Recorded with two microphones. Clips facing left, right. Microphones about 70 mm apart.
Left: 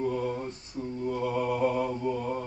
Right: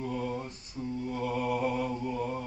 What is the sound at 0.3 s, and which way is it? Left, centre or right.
Mantra, left.